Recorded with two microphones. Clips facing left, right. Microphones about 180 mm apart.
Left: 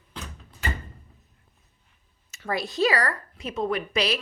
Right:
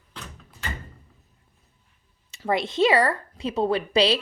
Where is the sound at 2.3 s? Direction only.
25° right (ahead or behind).